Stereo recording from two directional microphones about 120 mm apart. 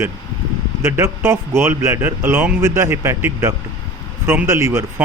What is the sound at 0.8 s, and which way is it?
Speech, 20° right (ahead or behind).